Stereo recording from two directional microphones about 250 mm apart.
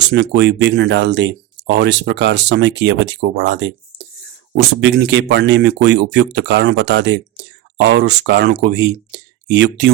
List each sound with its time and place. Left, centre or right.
0.1 s speech: right